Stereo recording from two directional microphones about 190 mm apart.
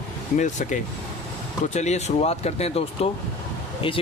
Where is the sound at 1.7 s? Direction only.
35° left (ahead or behind).